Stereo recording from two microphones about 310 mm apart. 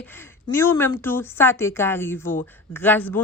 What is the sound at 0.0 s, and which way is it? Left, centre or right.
Speech, centre.